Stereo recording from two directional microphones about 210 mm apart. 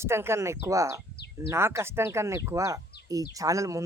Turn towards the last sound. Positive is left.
turn(degrees=-15)  # may be behind; listen again after turning